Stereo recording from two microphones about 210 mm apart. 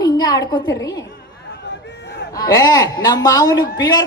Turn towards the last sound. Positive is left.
turn(degrees=20)  # may be behind; listen again after turning